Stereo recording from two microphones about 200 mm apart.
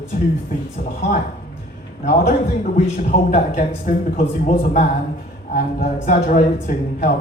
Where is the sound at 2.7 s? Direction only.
35° left (ahead or behind).